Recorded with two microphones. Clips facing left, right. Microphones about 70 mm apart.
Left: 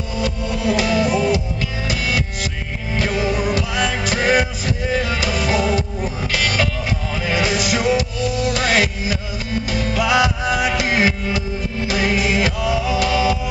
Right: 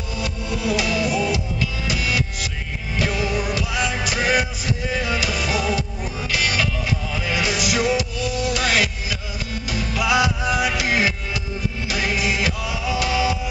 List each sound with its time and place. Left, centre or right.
0.2 s music: left